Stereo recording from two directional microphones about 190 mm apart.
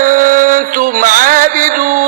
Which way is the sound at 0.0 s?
45° right (ahead or behind).